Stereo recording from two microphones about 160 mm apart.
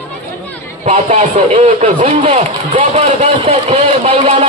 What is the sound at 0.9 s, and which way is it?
Speech, 45° right (ahead or behind).